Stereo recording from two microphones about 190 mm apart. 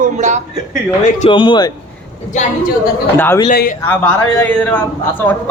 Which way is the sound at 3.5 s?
50° left (ahead or behind).